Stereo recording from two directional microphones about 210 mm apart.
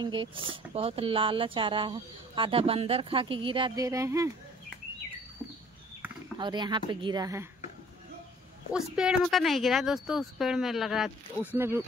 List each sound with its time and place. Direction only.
0.0 s speech: 25° right (ahead or behind)
6.3 s speech: 20° right (ahead or behind)
8.7 s speech: 5° right (ahead or behind)